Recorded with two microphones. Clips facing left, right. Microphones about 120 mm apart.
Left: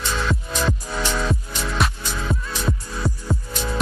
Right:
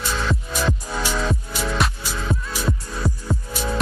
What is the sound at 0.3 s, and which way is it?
Music, 5° right (ahead or behind).